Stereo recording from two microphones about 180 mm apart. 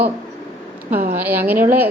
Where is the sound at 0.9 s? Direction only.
55° right (ahead or behind).